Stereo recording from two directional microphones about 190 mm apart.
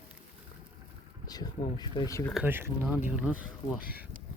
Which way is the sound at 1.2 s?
20° left (ahead or behind).